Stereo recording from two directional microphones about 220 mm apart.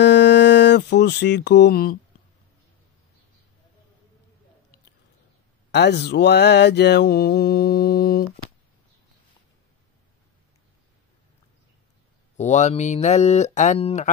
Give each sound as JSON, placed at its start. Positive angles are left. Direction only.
{"t": 0.0, "sound": "music", "side_deg": 50}
{"t": 5.7, "sound": "mantra", "side_deg": 50}
{"t": 12.4, "sound": "speech", "side_deg": 30}